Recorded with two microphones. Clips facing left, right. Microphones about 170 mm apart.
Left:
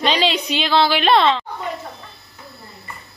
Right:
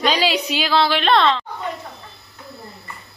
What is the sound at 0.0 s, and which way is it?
A woman's voice, 5° right (ahead or behind).